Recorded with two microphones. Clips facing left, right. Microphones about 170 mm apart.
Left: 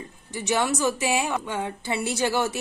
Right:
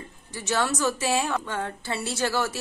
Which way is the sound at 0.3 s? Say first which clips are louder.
Left 2 dB; 15° left (ahead or behind).